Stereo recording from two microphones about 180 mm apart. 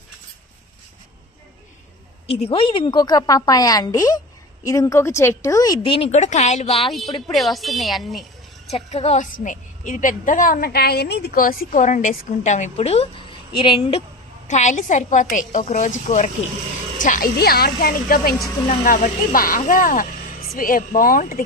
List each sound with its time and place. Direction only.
2.2 s a woman's voice: 30° left (ahead or behind)
6.8 s a woman's voice: centre (ahead or behind)
8.6 s a woman's voice: 35° left (ahead or behind); by 11.6 s 55° left (ahead or behind)
11.7 s a woman's voice: 45° left (ahead or behind)
14.5 s a woman's voice: 40° left (ahead or behind)
17.0 s speech: 50° left (ahead or behind)
18.7 s a woman's voice: 45° left (ahead or behind)